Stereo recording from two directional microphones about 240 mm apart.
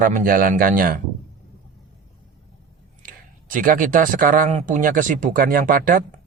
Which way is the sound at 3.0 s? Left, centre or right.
Right.